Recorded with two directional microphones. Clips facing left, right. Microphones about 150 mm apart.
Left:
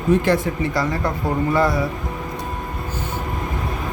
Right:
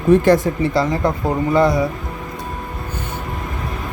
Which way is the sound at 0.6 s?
25° right (ahead or behind).